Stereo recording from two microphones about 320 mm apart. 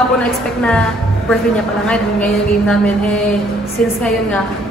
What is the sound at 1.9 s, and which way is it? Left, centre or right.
Mantra, centre.